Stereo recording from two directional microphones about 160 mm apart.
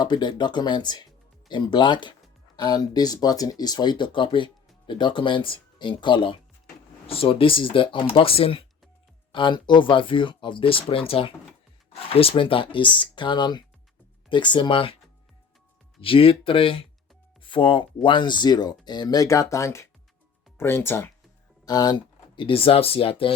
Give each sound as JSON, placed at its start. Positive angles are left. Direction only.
{"t": 0.0, "sound": "speech", "side_deg": 25}
{"t": 16.0, "sound": "speech", "side_deg": 35}
{"t": 21.6, "sound": "speech", "side_deg": 25}